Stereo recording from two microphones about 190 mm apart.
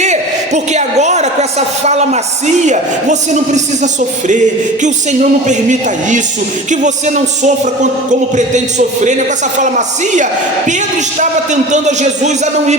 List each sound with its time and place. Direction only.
0.0 s a woman's voice: 35° right (ahead or behind)